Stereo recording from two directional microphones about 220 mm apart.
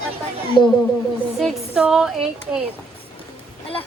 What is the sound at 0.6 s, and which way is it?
Speech, 20° left (ahead or behind).